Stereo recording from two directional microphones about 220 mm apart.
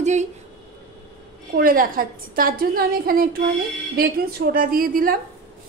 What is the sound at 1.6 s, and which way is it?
Speech, 40° right (ahead or behind).